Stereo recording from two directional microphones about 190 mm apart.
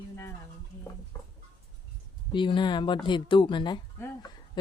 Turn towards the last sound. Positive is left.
turn(degrees=20)  # may be behind; listen again after turning